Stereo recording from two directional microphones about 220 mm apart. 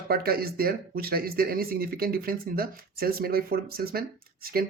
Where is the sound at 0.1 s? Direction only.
45° right (ahead or behind).